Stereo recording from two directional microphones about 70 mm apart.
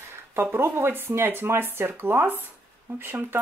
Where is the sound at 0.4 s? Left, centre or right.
Right.